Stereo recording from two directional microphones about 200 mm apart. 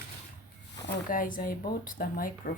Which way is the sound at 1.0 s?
45° left (ahead or behind).